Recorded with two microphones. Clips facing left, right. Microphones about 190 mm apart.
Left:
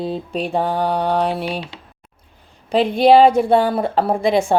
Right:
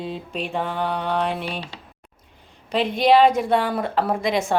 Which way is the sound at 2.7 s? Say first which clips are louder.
Left 5 dB; 35° left (ahead or behind).